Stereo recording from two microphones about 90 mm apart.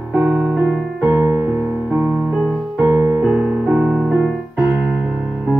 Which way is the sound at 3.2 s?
10° right (ahead or behind).